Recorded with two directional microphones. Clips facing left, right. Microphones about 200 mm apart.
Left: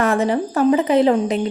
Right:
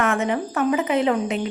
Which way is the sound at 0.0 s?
35° left (ahead or behind).